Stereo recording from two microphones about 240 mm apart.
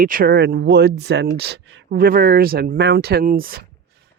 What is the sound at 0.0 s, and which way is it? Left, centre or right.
Speech, right.